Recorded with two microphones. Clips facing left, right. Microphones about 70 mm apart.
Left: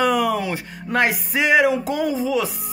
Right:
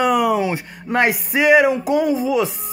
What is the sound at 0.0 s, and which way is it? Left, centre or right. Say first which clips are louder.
Speech: right 3 dB; centre.